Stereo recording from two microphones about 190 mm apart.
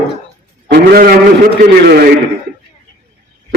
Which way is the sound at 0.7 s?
50° right (ahead or behind).